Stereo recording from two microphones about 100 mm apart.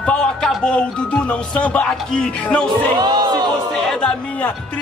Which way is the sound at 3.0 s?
45° right (ahead or behind).